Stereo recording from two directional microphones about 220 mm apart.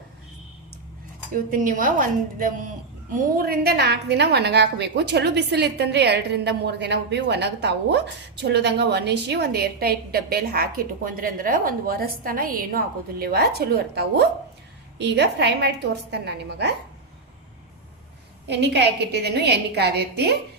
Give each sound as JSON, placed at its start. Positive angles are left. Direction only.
{"t": 1.3, "sound": "a woman's voice", "side_deg": -40}
{"t": 18.4, "sound": "a woman's voice", "side_deg": -50}